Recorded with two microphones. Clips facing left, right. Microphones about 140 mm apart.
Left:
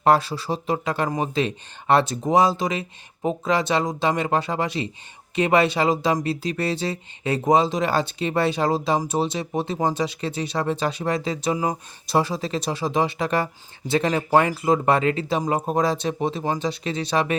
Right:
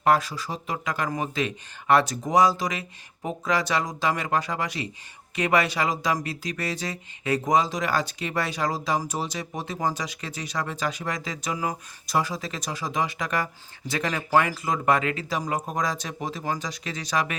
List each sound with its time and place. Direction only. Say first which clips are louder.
0.0 s speech: left 3 dB; 30° left (ahead or behind)